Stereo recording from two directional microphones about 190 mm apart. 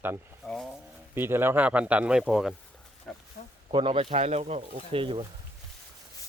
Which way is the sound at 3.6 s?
25° right (ahead or behind).